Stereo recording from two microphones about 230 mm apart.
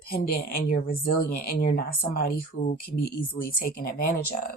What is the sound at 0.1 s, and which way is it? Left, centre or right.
Speech, left.